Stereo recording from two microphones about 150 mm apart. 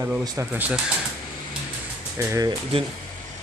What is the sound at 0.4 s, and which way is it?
Speech, 20° right (ahead or behind).